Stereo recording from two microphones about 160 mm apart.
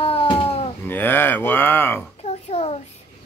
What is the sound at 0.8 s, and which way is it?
Speech, 15° left (ahead or behind).